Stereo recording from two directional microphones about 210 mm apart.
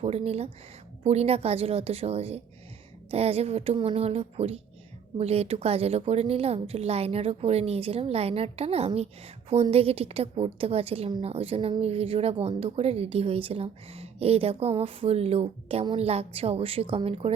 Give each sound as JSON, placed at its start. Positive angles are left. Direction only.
{"t": 0.0, "sound": "a woman's voice", "side_deg": -30}